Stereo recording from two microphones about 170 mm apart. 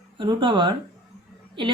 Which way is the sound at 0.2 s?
25° right (ahead or behind).